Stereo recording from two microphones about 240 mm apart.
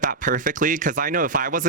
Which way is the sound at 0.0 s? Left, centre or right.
Right.